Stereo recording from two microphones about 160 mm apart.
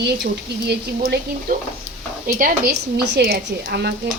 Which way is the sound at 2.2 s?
60° right (ahead or behind).